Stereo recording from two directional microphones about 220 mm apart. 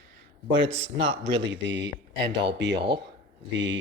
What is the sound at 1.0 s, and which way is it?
Speech, 55° right (ahead or behind).